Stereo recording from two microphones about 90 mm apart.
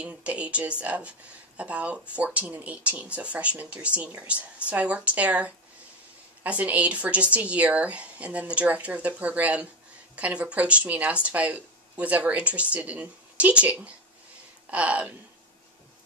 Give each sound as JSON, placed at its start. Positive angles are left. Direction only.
{"t": 0.0, "sound": "speech", "side_deg": -15}